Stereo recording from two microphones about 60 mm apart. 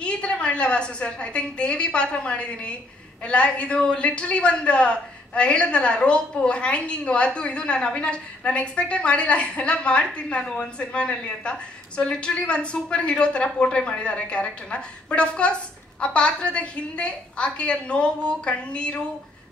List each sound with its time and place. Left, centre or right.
0.0 s a woman's voice: centre